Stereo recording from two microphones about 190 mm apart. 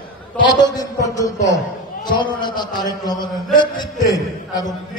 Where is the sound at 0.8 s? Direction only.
20° left (ahead or behind).